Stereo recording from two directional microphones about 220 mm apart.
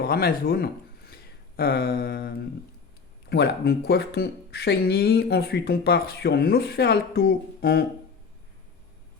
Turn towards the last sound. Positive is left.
turn(degrees=45)  # may be behind; listen again after turning